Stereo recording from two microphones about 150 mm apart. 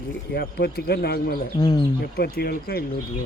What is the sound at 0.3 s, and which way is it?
Speech, 90° left.